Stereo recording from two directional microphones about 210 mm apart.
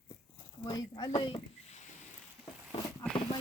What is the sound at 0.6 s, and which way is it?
Speech, 20° left (ahead or behind).